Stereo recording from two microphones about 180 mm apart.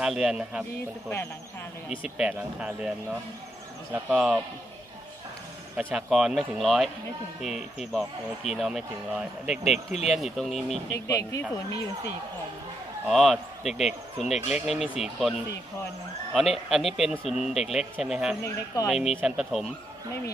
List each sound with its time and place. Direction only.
0.0 s speech: centre (ahead or behind)
1.9 s speech: 5° right (ahead or behind)
5.8 s speech: 5° right (ahead or behind)
11.1 s speech: 15° left (ahead or behind)
13.0 s speech: centre (ahead or behind)
16.3 s speech: centre (ahead or behind)